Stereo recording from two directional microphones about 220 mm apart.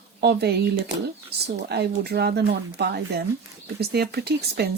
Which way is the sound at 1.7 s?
50° right (ahead or behind).